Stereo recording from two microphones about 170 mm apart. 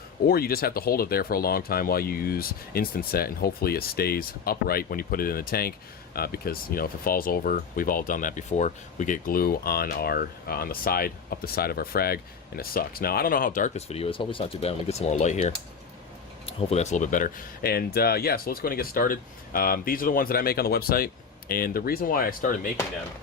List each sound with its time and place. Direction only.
0.3 s speech: 65° left (ahead or behind)